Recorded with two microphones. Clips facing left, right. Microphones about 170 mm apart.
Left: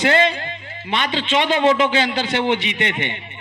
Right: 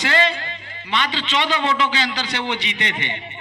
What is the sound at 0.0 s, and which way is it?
A man's voice, 50° left (ahead or behind).